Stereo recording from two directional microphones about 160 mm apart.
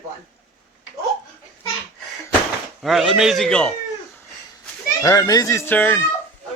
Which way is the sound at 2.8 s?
Centre (ahead or behind).